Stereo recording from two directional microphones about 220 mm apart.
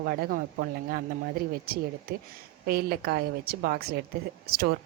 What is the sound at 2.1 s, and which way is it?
A woman's voice, 45° right (ahead or behind).